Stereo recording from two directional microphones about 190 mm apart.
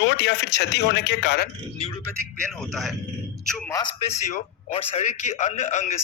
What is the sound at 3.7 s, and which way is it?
A man's voice, 30° left (ahead or behind).